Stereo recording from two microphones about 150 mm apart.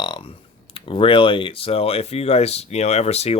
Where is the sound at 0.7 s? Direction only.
35° left (ahead or behind).